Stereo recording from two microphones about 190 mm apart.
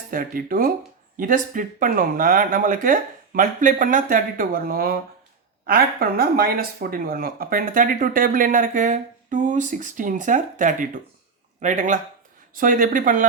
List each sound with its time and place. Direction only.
0.1 s speech: 45° right (ahead or behind)